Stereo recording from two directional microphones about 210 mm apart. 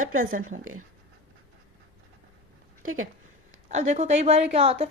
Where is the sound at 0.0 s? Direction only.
40° right (ahead or behind).